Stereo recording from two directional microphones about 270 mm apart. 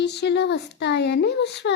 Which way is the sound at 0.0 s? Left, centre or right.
Left.